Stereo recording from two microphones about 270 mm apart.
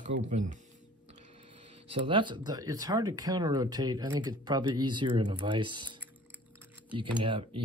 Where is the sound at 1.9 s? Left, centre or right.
Centre.